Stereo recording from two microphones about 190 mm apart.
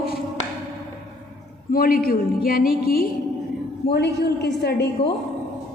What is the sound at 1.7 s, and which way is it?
A woman's voice, 50° left (ahead or behind).